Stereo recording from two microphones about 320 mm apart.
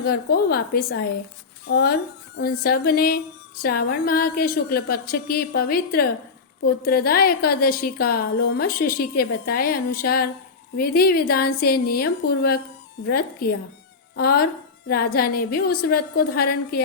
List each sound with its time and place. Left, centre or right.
0.0 s a woman's voice: left